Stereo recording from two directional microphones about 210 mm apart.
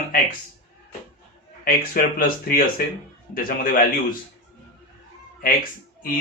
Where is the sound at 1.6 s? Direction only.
45° left (ahead or behind).